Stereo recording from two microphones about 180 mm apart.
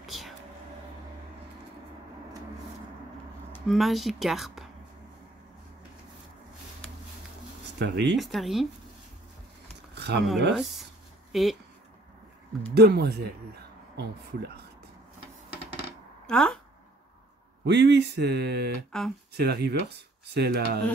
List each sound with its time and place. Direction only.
0.0 s a sound: centre (ahead or behind)
3.5 s speech: centre (ahead or behind)
7.8 s speech: 75° right (ahead or behind)
8.2 s speech: centre (ahead or behind)
9.9 s a sound: 70° right (ahead or behind)
10.5 s speech: centre (ahead or behind)
12.7 s speech: 60° right (ahead or behind)
16.3 s speech: 5° left (ahead or behind)
17.6 s speech: 70° right (ahead or behind)
18.9 s speech: centre (ahead or behind)
19.3 s speech: 65° right (ahead or behind)